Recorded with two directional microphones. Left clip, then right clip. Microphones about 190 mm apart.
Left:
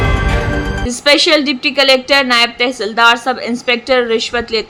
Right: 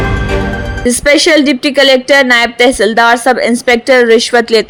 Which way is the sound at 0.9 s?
30° right (ahead or behind).